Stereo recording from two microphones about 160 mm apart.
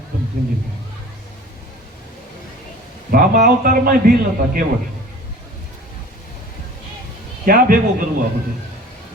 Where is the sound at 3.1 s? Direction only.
70° right (ahead or behind).